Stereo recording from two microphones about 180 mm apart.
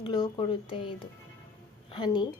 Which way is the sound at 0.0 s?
25° left (ahead or behind).